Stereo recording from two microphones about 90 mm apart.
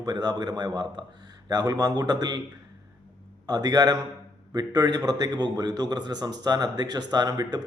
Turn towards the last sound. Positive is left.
turn(degrees=-45)  # may be behind; listen again after turning